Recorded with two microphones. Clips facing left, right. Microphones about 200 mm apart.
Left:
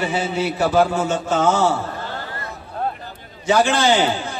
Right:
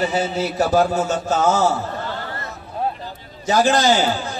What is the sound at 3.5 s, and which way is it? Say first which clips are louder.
Speech: even; 40° right (ahead or behind).